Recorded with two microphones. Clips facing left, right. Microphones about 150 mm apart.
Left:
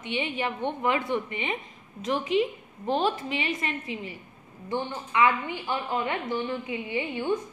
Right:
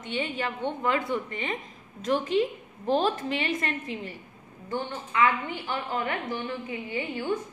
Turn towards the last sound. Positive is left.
turn(degrees=20)  # may be behind; listen again after turning